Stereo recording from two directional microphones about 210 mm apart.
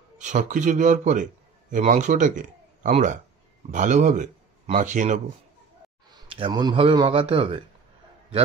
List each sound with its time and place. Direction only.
0.2 s a man's voice: 35° right (ahead or behind)
6.0 s a man's voice: 20° right (ahead or behind)